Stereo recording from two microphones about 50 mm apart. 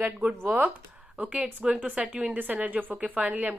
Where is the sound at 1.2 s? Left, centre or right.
Right.